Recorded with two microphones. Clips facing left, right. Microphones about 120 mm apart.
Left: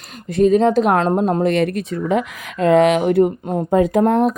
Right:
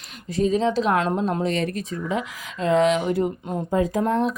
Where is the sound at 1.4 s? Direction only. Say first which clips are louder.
Left 7 dB; 65° left (ahead or behind).